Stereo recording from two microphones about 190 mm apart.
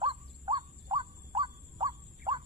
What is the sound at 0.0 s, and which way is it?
Crow, 25° right (ahead or behind).